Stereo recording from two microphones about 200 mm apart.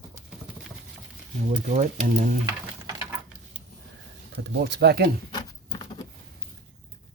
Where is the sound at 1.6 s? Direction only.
35° right (ahead or behind).